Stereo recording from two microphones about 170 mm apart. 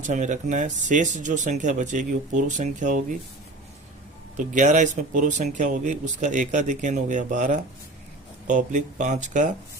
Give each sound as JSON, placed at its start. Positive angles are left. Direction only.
{"t": 0.0, "sound": "speech", "side_deg": -45}
{"t": 4.4, "sound": "speech", "side_deg": -45}